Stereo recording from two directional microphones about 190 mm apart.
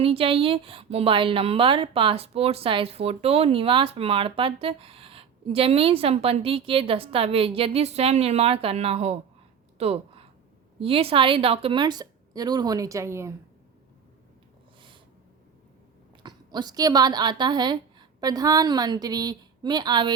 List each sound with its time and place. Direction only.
0.0 s a woman's voice: 30° right (ahead or behind)
9.7 s a sound: 30° right (ahead or behind)
10.8 s a woman's voice: 30° right (ahead or behind)
16.2 s a woman's voice: 20° right (ahead or behind)